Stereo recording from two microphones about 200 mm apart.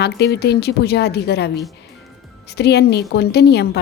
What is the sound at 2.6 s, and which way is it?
A woman's voice, 55° left (ahead or behind).